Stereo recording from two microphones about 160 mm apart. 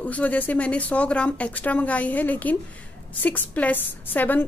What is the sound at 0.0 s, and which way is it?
A woman's voice, 10° left (ahead or behind).